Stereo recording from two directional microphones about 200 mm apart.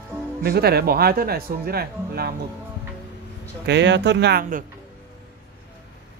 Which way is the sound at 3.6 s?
60° right (ahead or behind).